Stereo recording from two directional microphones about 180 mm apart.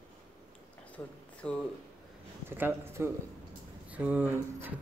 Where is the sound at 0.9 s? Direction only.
5° left (ahead or behind).